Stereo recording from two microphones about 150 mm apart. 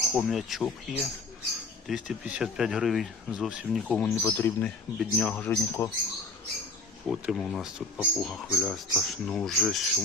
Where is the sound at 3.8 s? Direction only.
10° left (ahead or behind).